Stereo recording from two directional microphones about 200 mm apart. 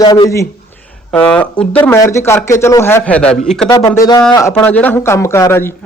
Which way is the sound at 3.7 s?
15° left (ahead or behind).